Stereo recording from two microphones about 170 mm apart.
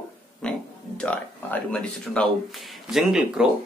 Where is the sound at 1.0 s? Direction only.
10° left (ahead or behind).